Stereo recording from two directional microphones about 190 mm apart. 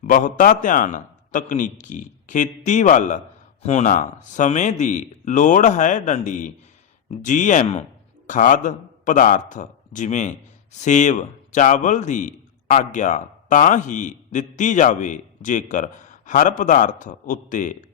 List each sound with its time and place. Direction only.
0.0 s a man's voice: 45° left (ahead or behind)